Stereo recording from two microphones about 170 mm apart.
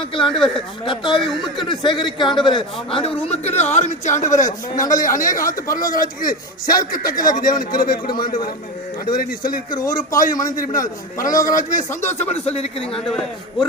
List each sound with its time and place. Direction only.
0.0 s speech: 30° left (ahead or behind)
0.3 s a man's voice: 5° left (ahead or behind)
0.9 s speech: 25° left (ahead or behind)
1.2 s a man's voice: centre (ahead or behind)
1.7 s a man's voice: 25° left (ahead or behind); by 7.9 s 55° left (ahead or behind)
9.0 s a man's voice: 55° left (ahead or behind)
12.3 s speech: 35° left (ahead or behind)
13.1 s a man's voice: centre (ahead or behind)